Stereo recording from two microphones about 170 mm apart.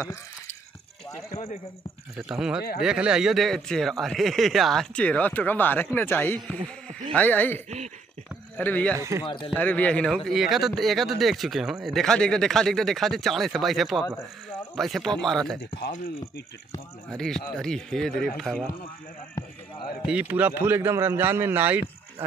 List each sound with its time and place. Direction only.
1.3 s speech: 35° left (ahead or behind)
2.1 s speech: 5° right (ahead or behind)
8.9 s a man's voice: 15° right (ahead or behind)
9.2 s speech: 30° left (ahead or behind)
9.6 s speech: 10° left (ahead or behind)
17.2 s speech: 5° left (ahead or behind)
20.0 s a man's voice: 5° right (ahead or behind)